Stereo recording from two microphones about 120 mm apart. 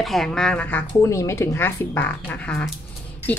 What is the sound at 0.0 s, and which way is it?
Speech, centre (ahead or behind).